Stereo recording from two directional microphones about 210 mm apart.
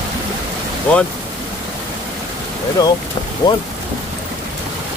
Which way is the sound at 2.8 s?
20° left (ahead or behind).